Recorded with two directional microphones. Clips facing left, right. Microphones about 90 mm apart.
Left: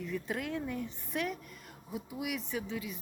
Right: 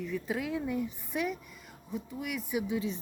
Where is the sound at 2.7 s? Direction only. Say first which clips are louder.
Right 7 dB; 30° right (ahead or behind).